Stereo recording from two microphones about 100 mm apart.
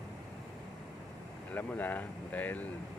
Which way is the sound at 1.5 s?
15° left (ahead or behind).